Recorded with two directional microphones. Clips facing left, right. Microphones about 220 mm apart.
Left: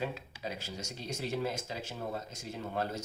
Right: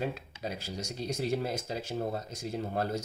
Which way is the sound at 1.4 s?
40° right (ahead or behind).